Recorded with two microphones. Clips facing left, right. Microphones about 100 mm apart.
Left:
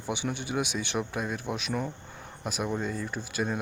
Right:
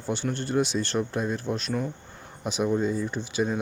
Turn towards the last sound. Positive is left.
turn(degrees=0)  # may be behind; listen again after turning